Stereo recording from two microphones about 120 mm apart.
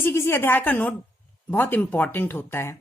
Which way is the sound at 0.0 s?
20° left (ahead or behind).